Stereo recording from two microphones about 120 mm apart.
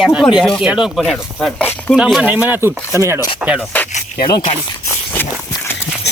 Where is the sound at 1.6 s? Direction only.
15° left (ahead or behind).